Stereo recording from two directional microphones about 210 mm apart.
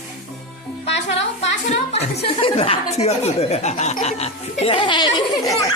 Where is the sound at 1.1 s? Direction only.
30° left (ahead or behind).